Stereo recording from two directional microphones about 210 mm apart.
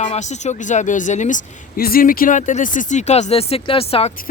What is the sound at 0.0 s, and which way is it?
Speech, 35° left (ahead or behind).